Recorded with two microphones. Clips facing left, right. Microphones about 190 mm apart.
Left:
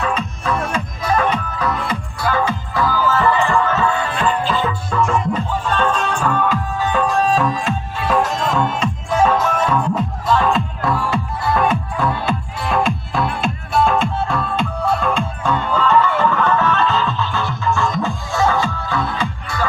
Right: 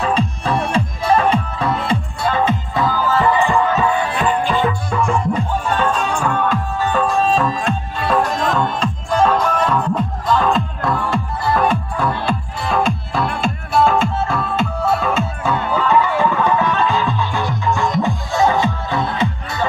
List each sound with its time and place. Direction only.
0.0 s music: 30° right (ahead or behind); by 6.3 s 10° right (ahead or behind)
6.5 s music: 10° left (ahead or behind); by 19.6 s 20° right (ahead or behind)